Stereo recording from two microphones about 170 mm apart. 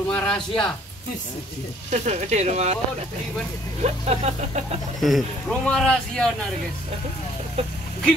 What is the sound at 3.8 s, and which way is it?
Speech, 40° right (ahead or behind).